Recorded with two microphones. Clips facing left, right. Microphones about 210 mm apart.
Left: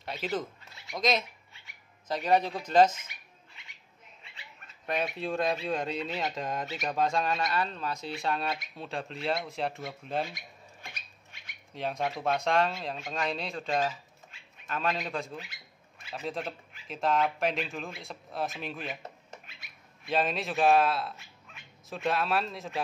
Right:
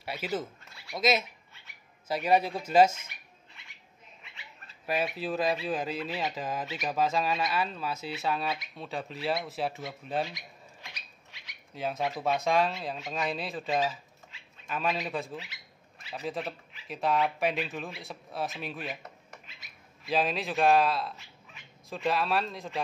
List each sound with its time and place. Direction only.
0.0 s speech: 10° right (ahead or behind)
4.8 s speech: 5° right (ahead or behind)
10.3 s squawk: 50° left (ahead or behind)
11.7 s speech: 5° right (ahead or behind)
20.1 s speech: centre (ahead or behind)